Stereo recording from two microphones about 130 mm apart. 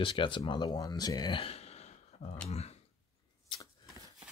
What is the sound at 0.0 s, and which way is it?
Speech, 40° left (ahead or behind).